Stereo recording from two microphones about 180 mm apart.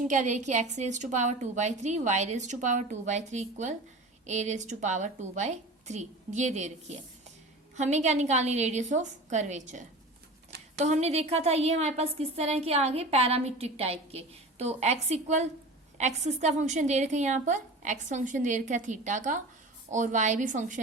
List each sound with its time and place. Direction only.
0.0 s a woman's voice: 45° right (ahead or behind)